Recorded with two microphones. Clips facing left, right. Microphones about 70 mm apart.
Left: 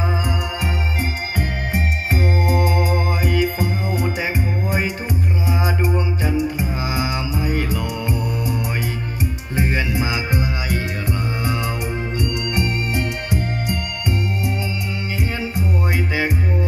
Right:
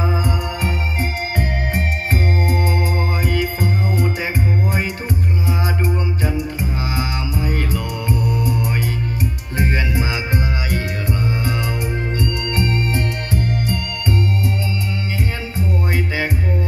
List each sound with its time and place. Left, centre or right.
1.3 s organ: right
2.6 s music: right
3.3 s music: centre
6.2 s music: centre
9.6 s music: centre